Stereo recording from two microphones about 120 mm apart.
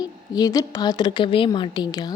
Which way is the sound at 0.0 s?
35° left (ahead or behind).